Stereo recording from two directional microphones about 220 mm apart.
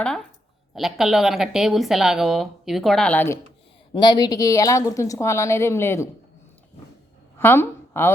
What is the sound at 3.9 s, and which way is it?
A woman's voice, 20° left (ahead or behind).